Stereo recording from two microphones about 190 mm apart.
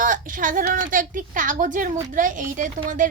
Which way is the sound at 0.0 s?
45° right (ahead or behind).